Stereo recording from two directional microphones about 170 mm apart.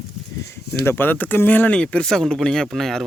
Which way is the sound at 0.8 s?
15° left (ahead or behind).